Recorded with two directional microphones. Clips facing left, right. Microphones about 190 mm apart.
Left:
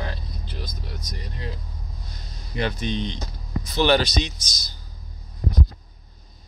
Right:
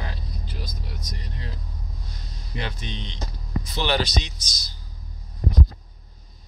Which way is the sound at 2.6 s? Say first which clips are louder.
Left 8 dB; 45° left (ahead or behind).